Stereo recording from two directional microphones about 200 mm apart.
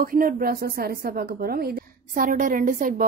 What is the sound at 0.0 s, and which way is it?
A woman's voice, 45° right (ahead or behind).